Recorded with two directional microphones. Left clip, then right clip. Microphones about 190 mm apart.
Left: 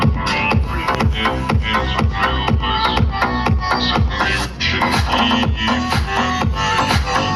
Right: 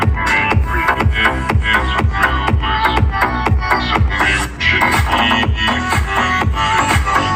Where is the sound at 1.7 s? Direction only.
15° left (ahead or behind).